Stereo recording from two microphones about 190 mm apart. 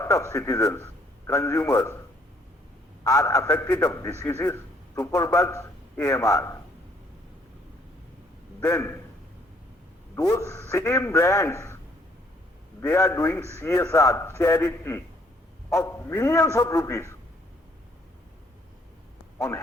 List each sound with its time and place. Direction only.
0.0 s a man's voice: 15° left (ahead or behind)
3.0 s a man's voice: 15° left (ahead or behind)
8.6 s a man's voice: 15° left (ahead or behind)
10.2 s a man's voice: 15° left (ahead or behind)
12.8 s a man's voice: 15° left (ahead or behind)